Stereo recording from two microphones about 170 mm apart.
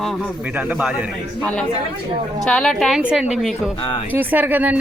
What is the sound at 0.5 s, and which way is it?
Speech, 10° right (ahead or behind).